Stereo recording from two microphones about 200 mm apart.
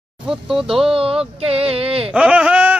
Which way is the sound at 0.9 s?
30° right (ahead or behind).